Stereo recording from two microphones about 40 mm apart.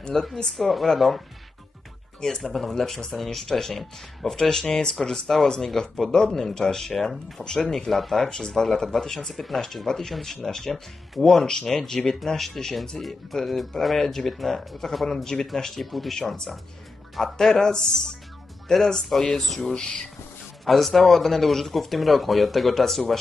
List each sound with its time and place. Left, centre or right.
0.1 s speech: centre
2.2 s speech: centre
7.9 s speech: centre
16.2 s speech: centre